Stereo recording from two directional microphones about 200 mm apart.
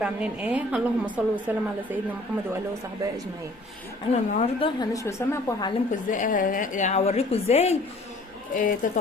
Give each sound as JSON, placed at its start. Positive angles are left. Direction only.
{"t": 0.0, "sound": "a woman's voice", "side_deg": -5}
{"t": 4.1, "sound": "a woman's voice", "side_deg": 35}
{"t": 4.8, "sound": "a woman's voice", "side_deg": 15}
{"t": 5.9, "sound": "a woman's voice", "side_deg": 40}